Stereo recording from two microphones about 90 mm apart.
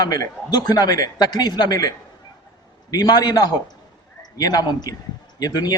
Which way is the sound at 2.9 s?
45° left (ahead or behind).